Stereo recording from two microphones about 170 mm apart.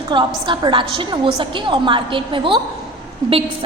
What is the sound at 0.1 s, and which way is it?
A woman's voice, 25° right (ahead or behind).